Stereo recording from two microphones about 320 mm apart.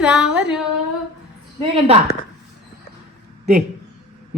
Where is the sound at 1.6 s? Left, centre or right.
Centre.